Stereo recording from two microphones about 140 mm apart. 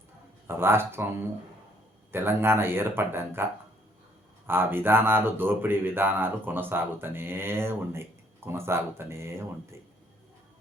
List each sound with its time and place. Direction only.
0.4 s speech: 15° right (ahead or behind)
2.1 s speech: 15° right (ahead or behind)